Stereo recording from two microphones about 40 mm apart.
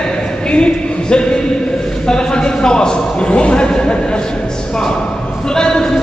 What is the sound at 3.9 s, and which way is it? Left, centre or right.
Music, left.